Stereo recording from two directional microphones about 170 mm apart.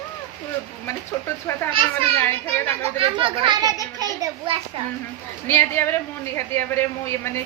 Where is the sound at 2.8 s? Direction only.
30° right (ahead or behind).